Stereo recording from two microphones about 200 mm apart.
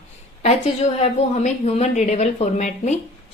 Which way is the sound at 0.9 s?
30° left (ahead or behind).